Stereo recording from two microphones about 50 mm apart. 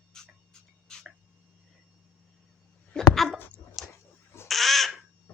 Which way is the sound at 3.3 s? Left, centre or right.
Left.